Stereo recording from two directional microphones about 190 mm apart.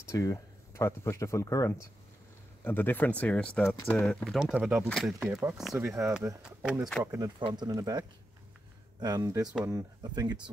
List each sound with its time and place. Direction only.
0.1 s speech: 15° left (ahead or behind); by 5.1 s centre (ahead or behind)
5.2 s speech: 10° right (ahead or behind)
7.1 s speech: 20° right (ahead or behind)